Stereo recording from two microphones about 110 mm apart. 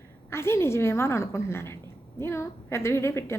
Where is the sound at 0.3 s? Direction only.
25° left (ahead or behind).